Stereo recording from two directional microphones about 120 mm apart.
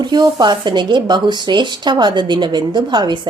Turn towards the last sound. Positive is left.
turn(degrees=-40)  # may be behind; listen again after turning